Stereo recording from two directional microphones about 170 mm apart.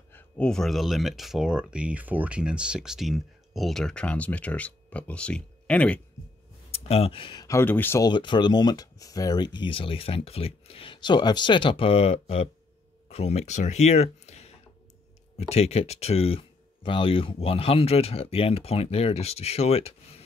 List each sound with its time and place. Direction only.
0.1 s speech: 5° left (ahead or behind)
6.7 s speech: 35° left (ahead or behind); by 8.1 s 15° left (ahead or behind)
8.1 s speech: 25° left (ahead or behind)